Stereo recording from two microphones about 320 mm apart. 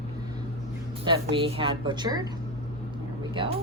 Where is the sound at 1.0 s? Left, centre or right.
Centre.